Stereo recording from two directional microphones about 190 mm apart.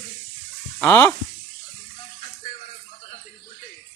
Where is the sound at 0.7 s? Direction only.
10° left (ahead or behind).